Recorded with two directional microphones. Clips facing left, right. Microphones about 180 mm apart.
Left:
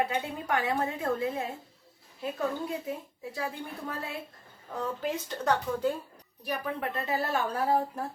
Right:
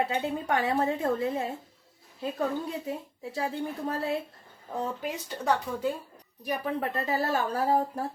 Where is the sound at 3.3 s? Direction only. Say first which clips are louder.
Right 5 dB; 35° right (ahead or behind).